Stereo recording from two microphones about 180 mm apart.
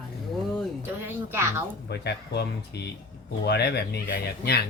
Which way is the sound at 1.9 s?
65° left (ahead or behind).